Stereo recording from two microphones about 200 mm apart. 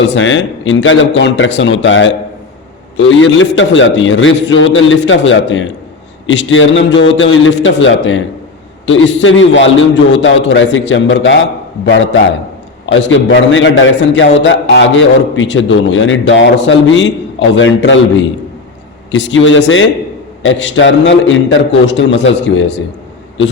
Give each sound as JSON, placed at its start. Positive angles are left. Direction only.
{"t": 0.1, "sound": "a man's voice", "side_deg": 70}